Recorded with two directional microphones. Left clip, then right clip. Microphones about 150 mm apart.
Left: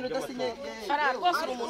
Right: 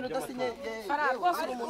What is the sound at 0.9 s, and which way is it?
Speech, 90° right.